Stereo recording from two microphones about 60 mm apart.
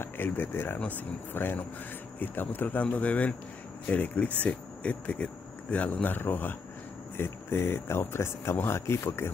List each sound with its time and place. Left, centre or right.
0.0 s speech: left
0.7 s speech: left